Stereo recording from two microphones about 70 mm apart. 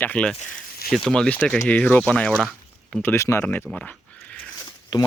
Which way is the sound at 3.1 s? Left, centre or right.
Left.